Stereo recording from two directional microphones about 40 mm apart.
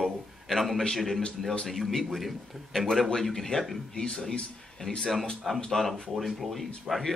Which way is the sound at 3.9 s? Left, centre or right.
Centre.